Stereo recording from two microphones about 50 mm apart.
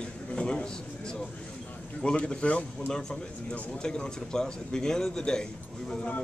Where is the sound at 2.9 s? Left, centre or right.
Centre.